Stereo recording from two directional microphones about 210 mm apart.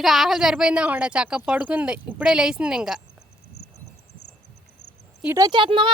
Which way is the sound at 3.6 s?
50° left (ahead or behind).